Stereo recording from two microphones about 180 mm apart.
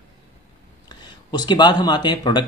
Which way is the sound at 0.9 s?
25° left (ahead or behind).